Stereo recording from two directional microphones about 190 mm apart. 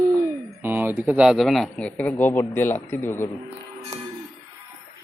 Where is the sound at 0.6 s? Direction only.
10° right (ahead or behind); by 3.2 s 10° left (ahead or behind).